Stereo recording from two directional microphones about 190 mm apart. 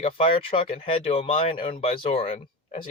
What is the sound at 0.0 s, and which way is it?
Speech, 30° left (ahead or behind).